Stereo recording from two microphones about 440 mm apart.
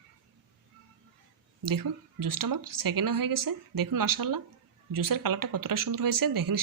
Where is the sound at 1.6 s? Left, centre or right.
Right.